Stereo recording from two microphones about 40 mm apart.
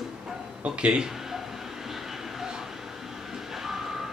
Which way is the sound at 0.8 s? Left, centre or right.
Right.